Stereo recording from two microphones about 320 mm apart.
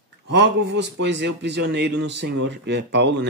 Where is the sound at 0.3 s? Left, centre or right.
Right.